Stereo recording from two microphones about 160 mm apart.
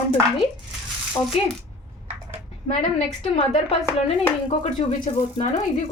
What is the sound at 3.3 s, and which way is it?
A woman's voice, 35° left (ahead or behind).